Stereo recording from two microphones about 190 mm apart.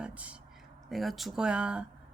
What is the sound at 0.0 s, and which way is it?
Speech, 5° right (ahead or behind).